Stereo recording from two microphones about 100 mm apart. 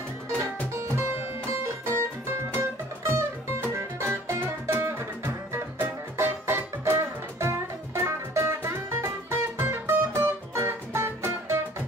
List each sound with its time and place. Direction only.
1.9 s music: 25° right (ahead or behind)